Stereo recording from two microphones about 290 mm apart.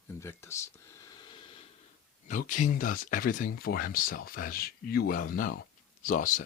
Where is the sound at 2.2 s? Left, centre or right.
Left.